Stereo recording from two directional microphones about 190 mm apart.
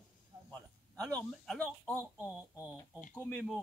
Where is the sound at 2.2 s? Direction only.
15° left (ahead or behind).